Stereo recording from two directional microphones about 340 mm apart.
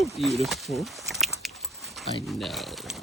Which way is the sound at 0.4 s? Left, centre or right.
Centre.